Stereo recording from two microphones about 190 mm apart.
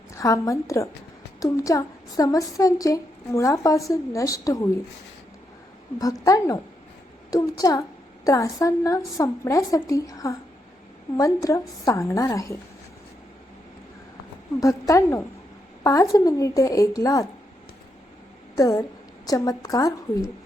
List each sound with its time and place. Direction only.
0.1 s a woman's voice: 15° left (ahead or behind)
6.0 s a woman's voice: 20° left (ahead or behind)
14.6 s a woman's voice: 15° left (ahead or behind)
18.5 s a woman's voice: 20° left (ahead or behind)